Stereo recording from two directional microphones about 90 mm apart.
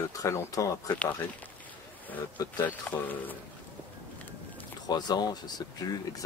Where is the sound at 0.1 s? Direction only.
40° left (ahead or behind).